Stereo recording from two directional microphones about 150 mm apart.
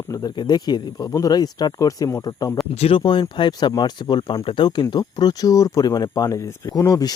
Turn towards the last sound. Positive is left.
turn(degrees=25)  # may be behind; listen again after turning